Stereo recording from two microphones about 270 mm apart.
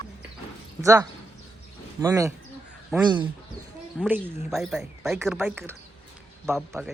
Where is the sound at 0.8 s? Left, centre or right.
Centre.